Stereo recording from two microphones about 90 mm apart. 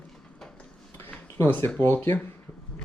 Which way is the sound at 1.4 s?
25° left (ahead or behind).